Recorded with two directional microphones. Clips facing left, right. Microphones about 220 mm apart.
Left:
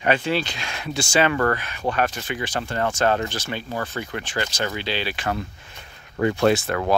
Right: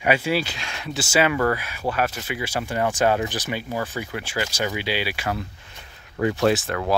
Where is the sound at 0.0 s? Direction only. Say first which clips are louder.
Even; 10° right (ahead or behind).